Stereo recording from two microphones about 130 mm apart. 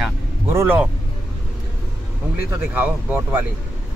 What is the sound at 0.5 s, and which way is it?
Speech, 15° right (ahead or behind).